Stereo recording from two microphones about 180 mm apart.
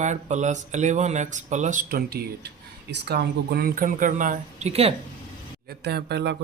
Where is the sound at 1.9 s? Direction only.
60° right (ahead or behind); by 4.9 s 35° right (ahead or behind).